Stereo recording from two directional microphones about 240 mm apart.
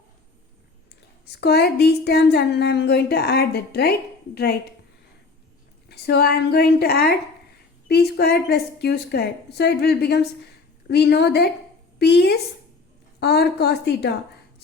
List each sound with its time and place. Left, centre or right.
1.2 s a woman's voice: left
5.9 s a woman's voice: left